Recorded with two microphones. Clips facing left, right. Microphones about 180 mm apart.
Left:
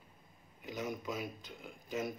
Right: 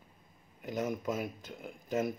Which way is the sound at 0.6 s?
50° right (ahead or behind).